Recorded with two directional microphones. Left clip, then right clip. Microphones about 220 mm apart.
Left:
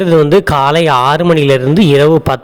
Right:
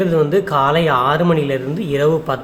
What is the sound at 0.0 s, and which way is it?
Speech, 40° left (ahead or behind).